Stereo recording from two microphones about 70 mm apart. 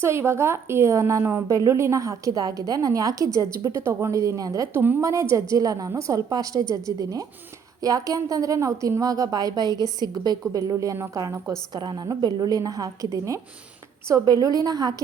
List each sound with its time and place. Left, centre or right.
0.0 s a woman's voice: right
1.5 s a woman's voice: right
4.7 s a woman's voice: right
5.0 s a woman's voice: right
10.7 s a woman's voice: right
11.7 s a woman's voice: right
14.3 s a woman's voice: right